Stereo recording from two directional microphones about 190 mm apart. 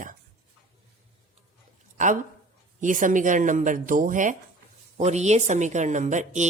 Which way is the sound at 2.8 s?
45° right (ahead or behind).